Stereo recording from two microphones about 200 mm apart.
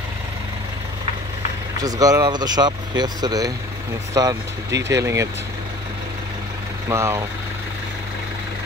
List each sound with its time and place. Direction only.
1.8 s speech: 20° right (ahead or behind)
6.9 s speech: 15° right (ahead or behind)